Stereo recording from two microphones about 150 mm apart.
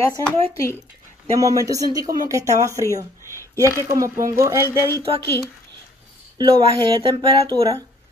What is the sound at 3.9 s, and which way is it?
Speech, 20° right (ahead or behind).